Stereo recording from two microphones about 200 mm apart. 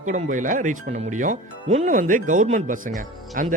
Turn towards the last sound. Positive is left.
turn(degrees=-40)  # may be behind; listen again after turning